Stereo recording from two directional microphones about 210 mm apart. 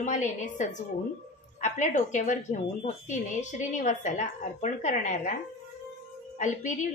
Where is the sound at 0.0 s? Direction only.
35° left (ahead or behind).